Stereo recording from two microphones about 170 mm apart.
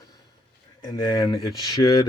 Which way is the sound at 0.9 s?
20° left (ahead or behind).